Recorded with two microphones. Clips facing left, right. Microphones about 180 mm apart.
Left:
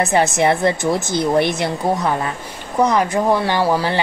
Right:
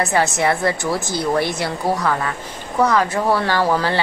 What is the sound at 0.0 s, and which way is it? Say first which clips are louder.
A woman's voice: left 2 dB; 20° left (ahead or behind).